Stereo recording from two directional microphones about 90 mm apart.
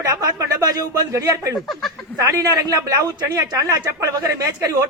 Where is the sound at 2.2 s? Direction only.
40° right (ahead or behind).